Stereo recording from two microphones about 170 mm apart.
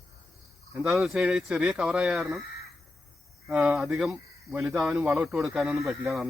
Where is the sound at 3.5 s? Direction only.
5° right (ahead or behind).